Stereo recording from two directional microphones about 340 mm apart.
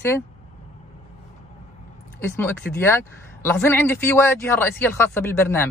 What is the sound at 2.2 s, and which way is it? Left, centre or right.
Speech, centre.